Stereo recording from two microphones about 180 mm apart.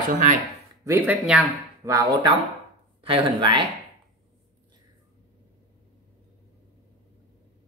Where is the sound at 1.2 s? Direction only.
5° right (ahead or behind).